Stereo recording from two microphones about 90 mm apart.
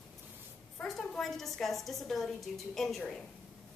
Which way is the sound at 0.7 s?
5° left (ahead or behind).